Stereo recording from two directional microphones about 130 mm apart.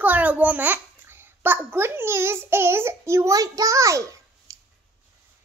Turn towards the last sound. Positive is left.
turn(degrees=-25)  # may be behind; listen again after turning